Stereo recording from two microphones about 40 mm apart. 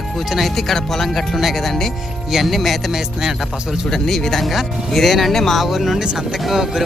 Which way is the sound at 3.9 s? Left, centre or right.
Centre.